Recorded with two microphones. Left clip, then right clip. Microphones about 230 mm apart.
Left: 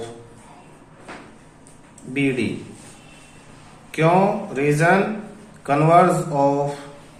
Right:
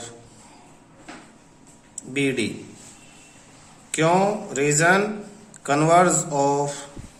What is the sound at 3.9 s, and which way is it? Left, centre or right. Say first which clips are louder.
A man's voice: left 2 dB; right.